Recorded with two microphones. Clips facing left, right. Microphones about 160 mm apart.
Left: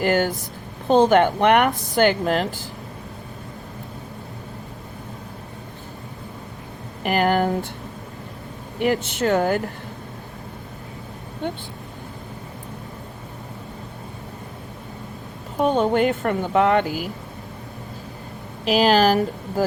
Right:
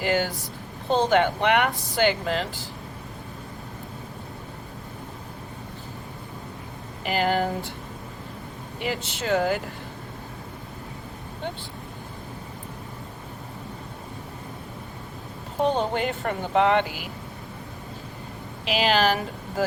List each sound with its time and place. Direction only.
0.0 s speech: 50° left (ahead or behind)
7.0 s speech: 55° left (ahead or behind)
8.8 s speech: 55° left (ahead or behind)
15.6 s speech: 50° left (ahead or behind)
18.6 s speech: 40° left (ahead or behind)